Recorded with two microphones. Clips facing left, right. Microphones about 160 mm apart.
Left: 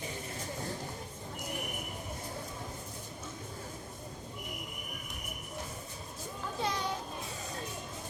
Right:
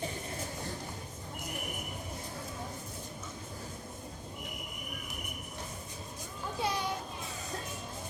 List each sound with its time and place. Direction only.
6.6 s children playing: 10° right (ahead or behind)